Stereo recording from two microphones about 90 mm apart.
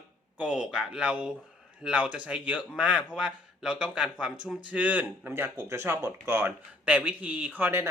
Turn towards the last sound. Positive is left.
turn(degrees=-25)  # may be behind; listen again after turning